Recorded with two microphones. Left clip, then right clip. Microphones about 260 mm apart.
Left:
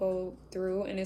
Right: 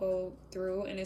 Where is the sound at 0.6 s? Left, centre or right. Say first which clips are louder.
Left 2 dB; centre.